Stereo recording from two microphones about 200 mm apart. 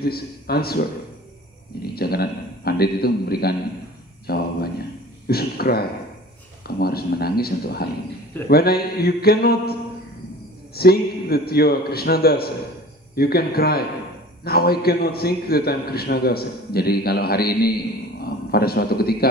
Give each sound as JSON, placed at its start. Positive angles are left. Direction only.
{"t": 0.0, "sound": "a man's voice", "side_deg": 50}